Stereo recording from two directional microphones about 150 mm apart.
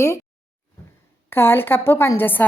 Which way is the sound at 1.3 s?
15° left (ahead or behind).